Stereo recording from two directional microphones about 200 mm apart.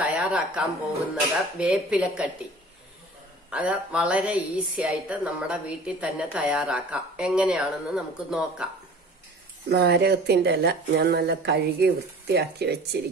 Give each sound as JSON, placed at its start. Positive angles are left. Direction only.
{"t": 0.0, "sound": "speech", "side_deg": -5}
{"t": 3.4, "sound": "a woman's voice", "side_deg": -5}
{"t": 9.7, "sound": "speech", "side_deg": -55}